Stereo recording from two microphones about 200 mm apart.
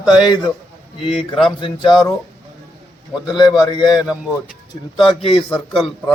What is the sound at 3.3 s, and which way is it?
Speech, 20° left (ahead or behind).